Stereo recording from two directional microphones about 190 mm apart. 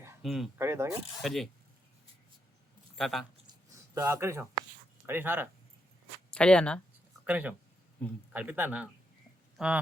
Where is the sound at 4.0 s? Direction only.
15° right (ahead or behind).